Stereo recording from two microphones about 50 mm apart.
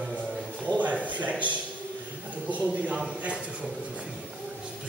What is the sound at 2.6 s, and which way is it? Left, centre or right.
Speech, right.